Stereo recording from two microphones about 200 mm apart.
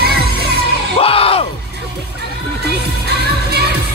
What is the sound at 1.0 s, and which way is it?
Music, 30° left (ahead or behind).